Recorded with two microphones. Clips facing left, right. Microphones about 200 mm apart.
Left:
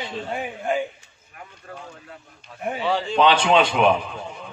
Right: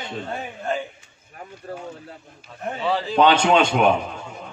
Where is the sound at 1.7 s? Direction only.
30° right (ahead or behind).